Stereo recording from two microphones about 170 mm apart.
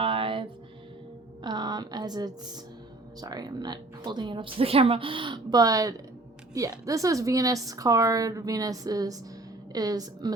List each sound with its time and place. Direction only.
0.0 s music: 30° right (ahead or behind)
1.4 s a woman's voice: 25° right (ahead or behind)